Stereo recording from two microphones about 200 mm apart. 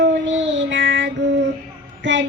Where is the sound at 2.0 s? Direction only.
65° right (ahead or behind).